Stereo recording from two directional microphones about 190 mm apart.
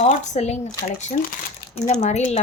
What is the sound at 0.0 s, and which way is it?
Speech, 35° left (ahead or behind).